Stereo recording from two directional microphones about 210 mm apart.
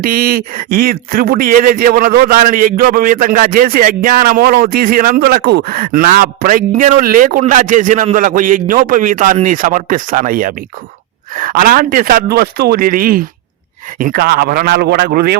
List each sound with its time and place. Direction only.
0.0 s a man's voice: 45° right (ahead or behind)